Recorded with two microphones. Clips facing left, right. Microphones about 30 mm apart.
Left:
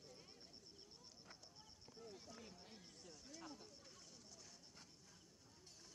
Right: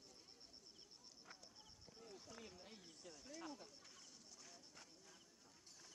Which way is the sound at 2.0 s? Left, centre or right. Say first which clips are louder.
Even; centre.